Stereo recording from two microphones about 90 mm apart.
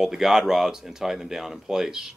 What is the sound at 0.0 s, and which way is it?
Speech, 5° right (ahead or behind).